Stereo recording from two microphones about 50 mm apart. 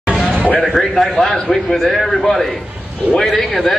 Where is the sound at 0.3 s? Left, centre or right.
Right.